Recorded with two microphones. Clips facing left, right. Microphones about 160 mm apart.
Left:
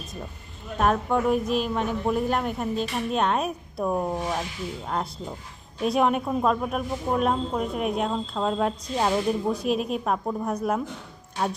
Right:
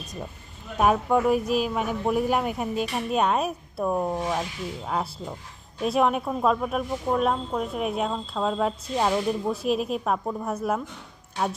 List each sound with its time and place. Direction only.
0.8 s a woman's voice: 5° right (ahead or behind)